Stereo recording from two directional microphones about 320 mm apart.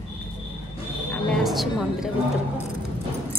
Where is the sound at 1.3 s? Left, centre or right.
Centre.